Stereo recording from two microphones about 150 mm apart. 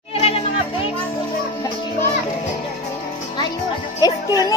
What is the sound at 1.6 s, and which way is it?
Music, 20° left (ahead or behind).